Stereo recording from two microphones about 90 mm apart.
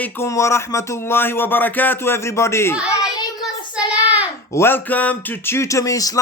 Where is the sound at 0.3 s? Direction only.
35° left (ahead or behind).